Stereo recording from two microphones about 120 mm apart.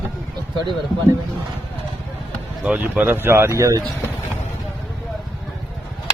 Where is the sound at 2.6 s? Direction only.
15° right (ahead or behind); by 3.9 s 30° right (ahead or behind).